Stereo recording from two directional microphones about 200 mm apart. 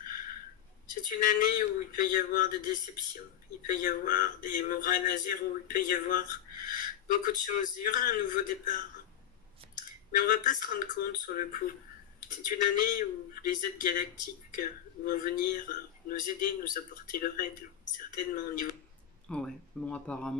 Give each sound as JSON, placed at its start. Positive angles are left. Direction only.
{"t": 0.0, "sound": "a sound", "side_deg": 45}
{"t": 1.0, "sound": "speech", "side_deg": 45}
{"t": 10.1, "sound": "speech", "side_deg": 45}
{"t": 19.2, "sound": "speech", "side_deg": 5}